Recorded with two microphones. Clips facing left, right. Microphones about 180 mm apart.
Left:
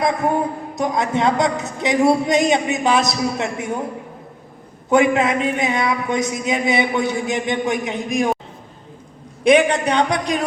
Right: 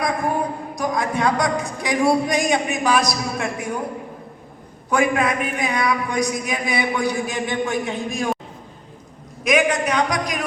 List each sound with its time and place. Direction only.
0.2 s speech: 25° left (ahead or behind)
4.9 s speech: 25° left (ahead or behind)
9.4 s speech: 30° left (ahead or behind)